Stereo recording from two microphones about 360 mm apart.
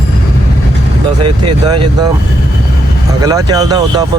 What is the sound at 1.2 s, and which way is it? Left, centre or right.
Speech, centre.